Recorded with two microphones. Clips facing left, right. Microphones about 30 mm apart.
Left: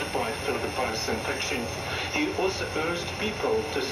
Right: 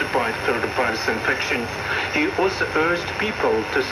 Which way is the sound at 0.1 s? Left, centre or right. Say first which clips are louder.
Right 7 dB; right.